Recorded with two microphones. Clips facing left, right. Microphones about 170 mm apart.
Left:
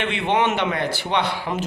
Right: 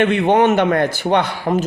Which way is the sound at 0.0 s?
45° right (ahead or behind).